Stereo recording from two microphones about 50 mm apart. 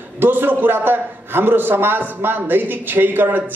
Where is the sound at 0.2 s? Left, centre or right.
Right.